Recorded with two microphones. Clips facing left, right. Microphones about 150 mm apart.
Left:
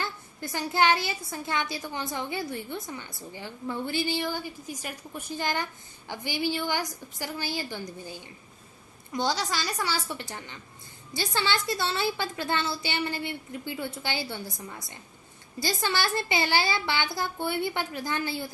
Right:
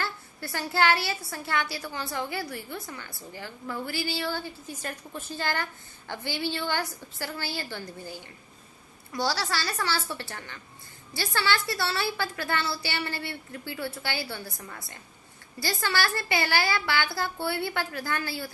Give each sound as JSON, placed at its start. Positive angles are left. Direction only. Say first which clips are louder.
{"t": 0.0, "sound": "a woman's voice", "louder": "even", "side_deg": 20}